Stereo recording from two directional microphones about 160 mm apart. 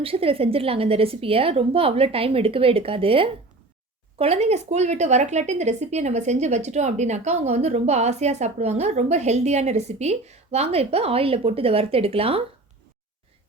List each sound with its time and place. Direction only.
0.0 s a woman's voice: 35° right (ahead or behind)